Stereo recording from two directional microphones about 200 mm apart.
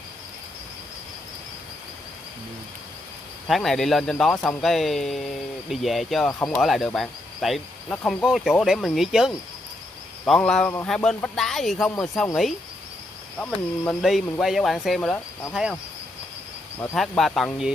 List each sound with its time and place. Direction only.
3.4 s speech: centre (ahead or behind)
13.4 s speech: 5° left (ahead or behind)
16.9 s speech: centre (ahead or behind)